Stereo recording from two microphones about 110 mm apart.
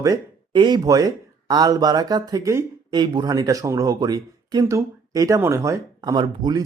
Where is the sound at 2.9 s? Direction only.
45° right (ahead or behind); by 5.8 s 25° right (ahead or behind).